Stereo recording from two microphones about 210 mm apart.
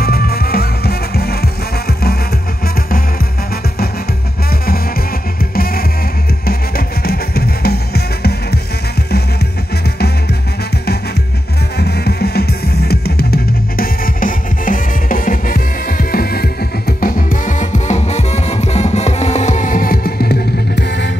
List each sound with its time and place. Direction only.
0.0 s music: 45° left (ahead or behind)
7.0 s music: 45° left (ahead or behind)
11.8 s music: 50° left (ahead or behind)